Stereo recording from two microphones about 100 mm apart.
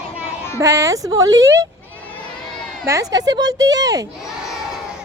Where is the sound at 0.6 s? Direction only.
30° right (ahead or behind).